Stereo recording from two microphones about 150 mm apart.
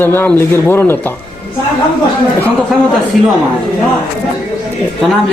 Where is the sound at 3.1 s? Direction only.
Centre (ahead or behind).